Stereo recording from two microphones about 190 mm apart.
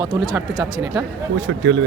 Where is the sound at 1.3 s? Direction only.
75° right (ahead or behind).